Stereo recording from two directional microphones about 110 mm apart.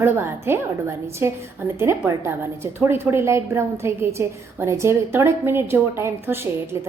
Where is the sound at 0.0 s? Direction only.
20° right (ahead or behind).